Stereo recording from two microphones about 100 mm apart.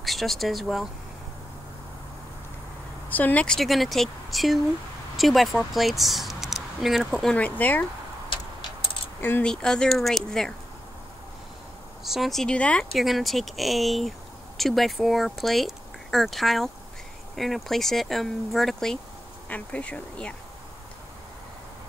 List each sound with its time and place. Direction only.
0.0 s speech: centre (ahead or behind)
3.1 s speech: 15° left (ahead or behind)
3.5 s speech: centre (ahead or behind)
7.3 s speech: 15° left (ahead or behind)
8.3 s tick-tock: 60° left (ahead or behind)
9.4 s speech: 5° left (ahead or behind)
12.0 s speech: centre (ahead or behind)
12.9 s speech: centre (ahead or behind)